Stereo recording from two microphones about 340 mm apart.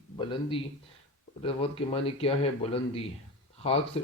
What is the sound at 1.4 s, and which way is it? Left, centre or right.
Speech, centre.